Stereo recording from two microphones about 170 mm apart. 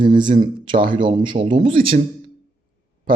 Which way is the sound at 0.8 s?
55° right (ahead or behind).